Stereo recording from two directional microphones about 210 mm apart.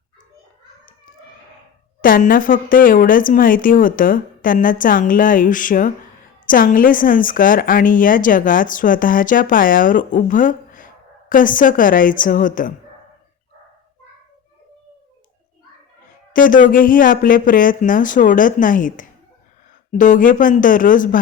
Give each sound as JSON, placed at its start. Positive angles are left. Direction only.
{"t": 2.0, "sound": "a woman's voice", "side_deg": 40}
{"t": 16.3, "sound": "a woman's voice", "side_deg": 40}